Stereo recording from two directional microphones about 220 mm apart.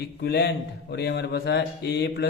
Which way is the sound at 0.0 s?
50° left (ahead or behind).